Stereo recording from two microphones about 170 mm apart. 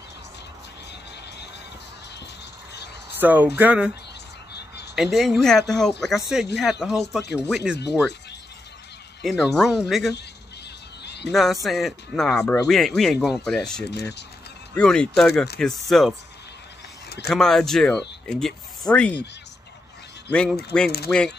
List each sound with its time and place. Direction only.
3.2 s speech: 10° right (ahead or behind)
4.9 s speech: centre (ahead or behind)
9.2 s speech: centre (ahead or behind)
11.1 s a sound: 80° left
11.6 s speech: centre (ahead or behind)
17.3 s speech: 5° left (ahead or behind)
20.2 s speech: 5° left (ahead or behind)